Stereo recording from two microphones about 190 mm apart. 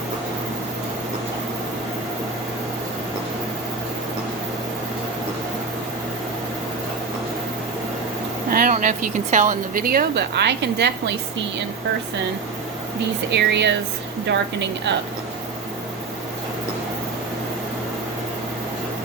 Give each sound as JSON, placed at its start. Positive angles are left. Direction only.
{"t": 8.4, "sound": "vehicle", "side_deg": -50}
{"t": 8.7, "sound": "speech", "side_deg": -45}
{"t": 13.3, "sound": "a woman's voice", "side_deg": -65}